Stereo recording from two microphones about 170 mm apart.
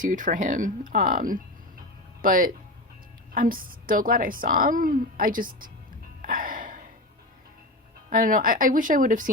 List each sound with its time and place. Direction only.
0.0 s a woman's voice: 50° right (ahead or behind)
6.2 s music: 55° right (ahead or behind)
8.1 s speech: 55° right (ahead or behind)